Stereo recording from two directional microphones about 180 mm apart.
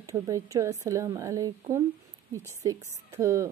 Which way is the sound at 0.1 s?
15° right (ahead or behind).